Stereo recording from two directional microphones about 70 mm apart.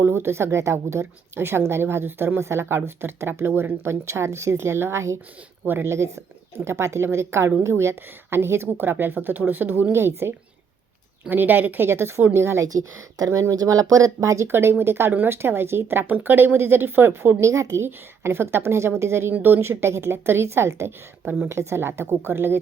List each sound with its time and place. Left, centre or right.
0.0 s a woman's voice: right
12.6 s a woman's voice: right